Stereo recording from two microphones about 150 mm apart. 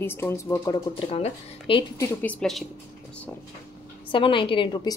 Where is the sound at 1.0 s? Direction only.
40° left (ahead or behind).